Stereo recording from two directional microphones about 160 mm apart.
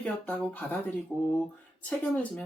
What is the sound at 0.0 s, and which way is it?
Speech, 10° left (ahead or behind).